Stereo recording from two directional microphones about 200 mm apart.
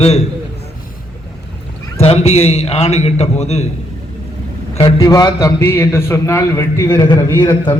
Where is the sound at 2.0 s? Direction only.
30° left (ahead or behind).